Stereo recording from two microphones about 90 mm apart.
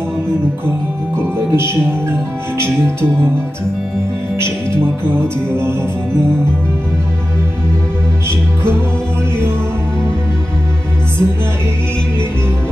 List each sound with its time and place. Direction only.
1.5 s speech: 30° right (ahead or behind)